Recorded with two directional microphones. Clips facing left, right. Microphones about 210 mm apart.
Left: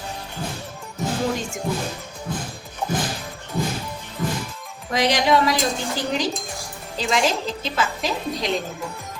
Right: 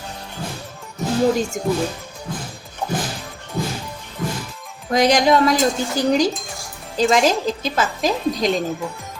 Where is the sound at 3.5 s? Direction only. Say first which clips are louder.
Even; centre (ahead or behind).